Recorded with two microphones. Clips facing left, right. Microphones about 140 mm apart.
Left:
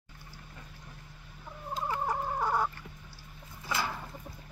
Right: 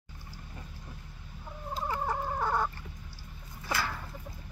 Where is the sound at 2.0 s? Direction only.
10° left (ahead or behind).